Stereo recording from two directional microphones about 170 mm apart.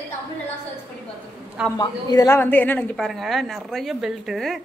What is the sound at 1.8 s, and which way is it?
Speech, 25° left (ahead or behind).